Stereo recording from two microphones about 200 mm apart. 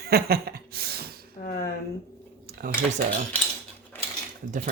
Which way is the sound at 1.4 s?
50° left (ahead or behind).